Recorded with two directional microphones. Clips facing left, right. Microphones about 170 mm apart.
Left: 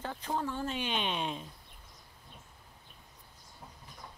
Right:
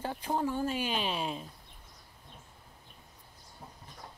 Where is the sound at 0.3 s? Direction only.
15° right (ahead or behind).